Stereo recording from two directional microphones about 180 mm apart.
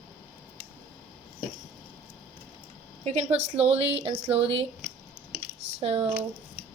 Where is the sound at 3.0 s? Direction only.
35° right (ahead or behind).